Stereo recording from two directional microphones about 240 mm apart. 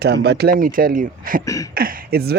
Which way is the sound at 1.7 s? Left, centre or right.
Right.